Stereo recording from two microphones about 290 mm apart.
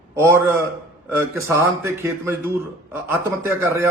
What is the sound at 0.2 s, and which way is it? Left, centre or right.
A man's voice, centre.